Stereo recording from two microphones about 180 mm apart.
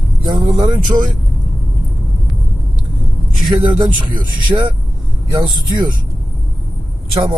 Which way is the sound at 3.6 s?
25° right (ahead or behind).